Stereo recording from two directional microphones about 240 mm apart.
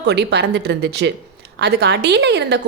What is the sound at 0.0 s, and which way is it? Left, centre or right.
A woman's voice, right.